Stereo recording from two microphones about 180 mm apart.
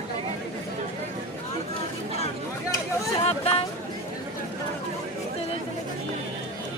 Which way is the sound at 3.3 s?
35° left (ahead or behind).